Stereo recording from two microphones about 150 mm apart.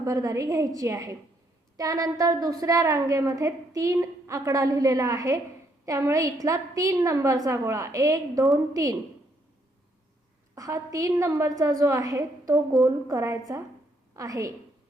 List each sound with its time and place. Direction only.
0.0 s a woman's voice: 20° right (ahead or behind)
10.5 s a woman's voice: 20° right (ahead or behind)